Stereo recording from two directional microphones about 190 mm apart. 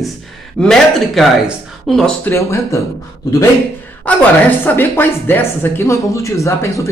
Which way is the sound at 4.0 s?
10° left (ahead or behind).